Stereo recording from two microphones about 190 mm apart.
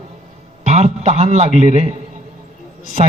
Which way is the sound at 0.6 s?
35° right (ahead or behind).